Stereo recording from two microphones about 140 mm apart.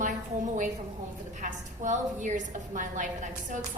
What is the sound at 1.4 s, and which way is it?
A woman's voice, 65° right (ahead or behind).